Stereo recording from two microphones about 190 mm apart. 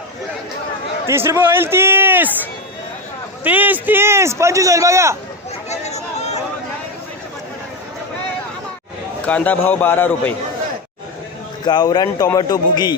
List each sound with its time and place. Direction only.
1.1 s a man's voice: 10° right (ahead or behind)
5.6 s chatter: 35° left (ahead or behind)
9.2 s a man's voice: 5° left (ahead or behind)
11.6 s a man's voice: 20° left (ahead or behind)